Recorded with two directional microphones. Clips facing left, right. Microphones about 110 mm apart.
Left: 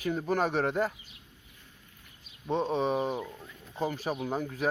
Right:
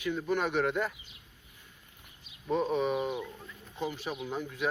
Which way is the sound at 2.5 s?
30° left (ahead or behind).